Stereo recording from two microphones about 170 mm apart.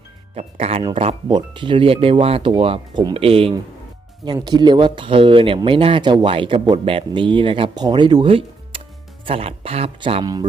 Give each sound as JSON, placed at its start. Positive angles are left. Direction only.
{"t": 0.3, "sound": "speech", "side_deg": -40}